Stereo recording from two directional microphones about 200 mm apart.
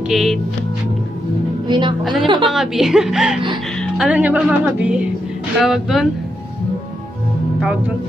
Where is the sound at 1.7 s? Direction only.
25° right (ahead or behind).